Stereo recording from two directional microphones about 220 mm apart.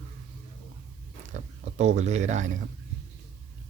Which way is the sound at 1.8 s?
30° right (ahead or behind).